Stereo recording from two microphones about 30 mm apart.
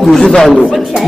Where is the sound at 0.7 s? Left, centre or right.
Centre.